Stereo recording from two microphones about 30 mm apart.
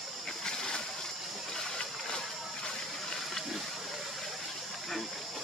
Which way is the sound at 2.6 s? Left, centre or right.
Left.